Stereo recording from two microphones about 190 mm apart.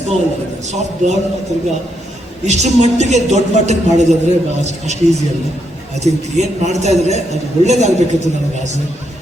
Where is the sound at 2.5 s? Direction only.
35° right (ahead or behind).